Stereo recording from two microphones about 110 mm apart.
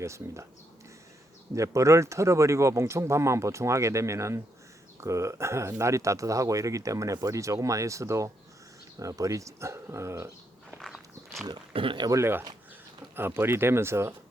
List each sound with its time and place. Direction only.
0.0 s speech: 25° right (ahead or behind)
1.5 s speech: 30° right (ahead or behind)
10.8 s walk: centre (ahead or behind)
11.7 s speech: 50° right (ahead or behind)
12.1 s speech: 20° right (ahead or behind)